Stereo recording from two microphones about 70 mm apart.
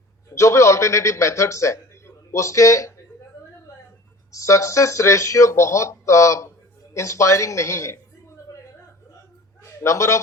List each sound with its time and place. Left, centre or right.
0.3 s a man's voice: left
4.3 s speech: left
9.8 s speech: left